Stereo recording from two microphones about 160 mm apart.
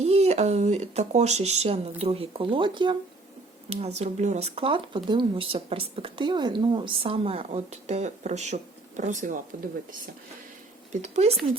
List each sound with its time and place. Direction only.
0.0 s speech: 40° right (ahead or behind)
3.7 s speech: 45° right (ahead or behind)
10.9 s speech: 45° right (ahead or behind)